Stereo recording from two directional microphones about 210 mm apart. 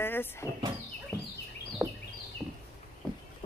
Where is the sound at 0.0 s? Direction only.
10° left (ahead or behind).